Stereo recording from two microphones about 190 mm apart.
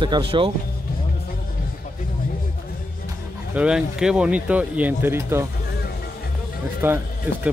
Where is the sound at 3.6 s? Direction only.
5° right (ahead or behind).